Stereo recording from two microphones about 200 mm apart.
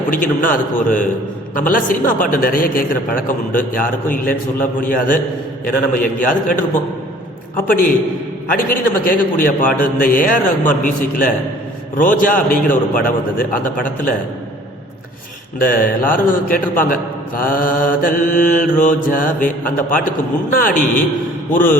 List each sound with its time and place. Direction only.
0.1 s a man's voice: 40° left (ahead or behind)
7.7 s a man's voice: 45° left (ahead or behind)
15.5 s a man's voice: 45° left (ahead or behind)